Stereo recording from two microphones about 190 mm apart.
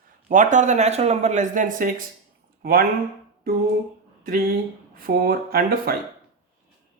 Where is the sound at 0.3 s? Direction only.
40° right (ahead or behind).